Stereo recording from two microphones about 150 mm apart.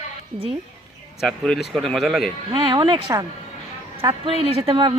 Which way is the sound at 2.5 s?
30° right (ahead or behind).